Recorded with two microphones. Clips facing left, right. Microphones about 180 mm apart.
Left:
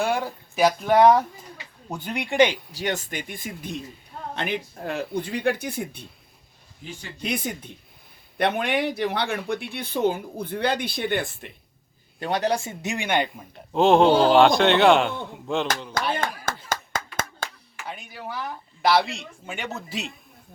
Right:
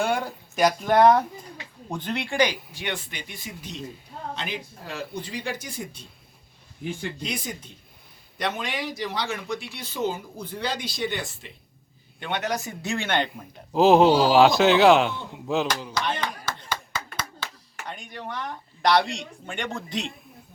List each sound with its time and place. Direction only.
0.0 s a man's voice: centre (ahead or behind); by 2.6 s 20° left (ahead or behind)
2.7 s speech: 40° left (ahead or behind); by 6.1 s 60° left (ahead or behind)
7.2 s speech: 55° left (ahead or behind)
12.2 s a man's voice: 35° left (ahead or behind); by 15.6 s centre (ahead or behind)
16.6 s clapping: 45° left (ahead or behind)
17.8 s speech: 5° left (ahead or behind)